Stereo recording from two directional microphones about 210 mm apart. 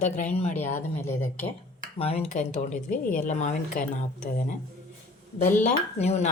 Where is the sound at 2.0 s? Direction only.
30° left (ahead or behind).